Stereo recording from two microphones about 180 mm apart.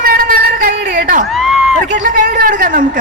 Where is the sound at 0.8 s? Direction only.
75° right (ahead or behind).